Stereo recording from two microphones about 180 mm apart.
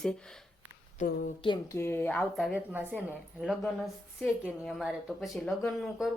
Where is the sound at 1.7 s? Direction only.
15° left (ahead or behind).